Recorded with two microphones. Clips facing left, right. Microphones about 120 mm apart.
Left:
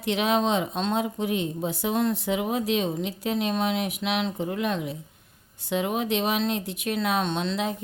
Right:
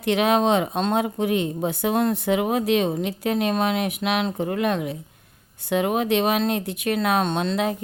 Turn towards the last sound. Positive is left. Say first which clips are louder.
# right 4 dB
turn(degrees=-55)  # may be behind; listen again after turning